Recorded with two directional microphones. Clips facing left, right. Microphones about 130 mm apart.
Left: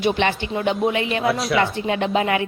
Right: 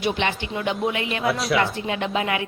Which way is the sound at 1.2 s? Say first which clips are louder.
Even; centre (ahead or behind).